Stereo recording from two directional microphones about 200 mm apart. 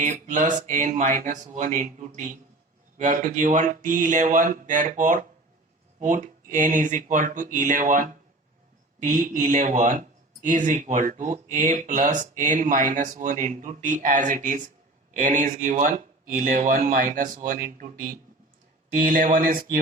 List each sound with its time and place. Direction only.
0.0 s speech: 40° right (ahead or behind)